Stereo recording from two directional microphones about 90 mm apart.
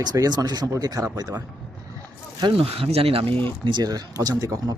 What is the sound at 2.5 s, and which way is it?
Speech, 90° right.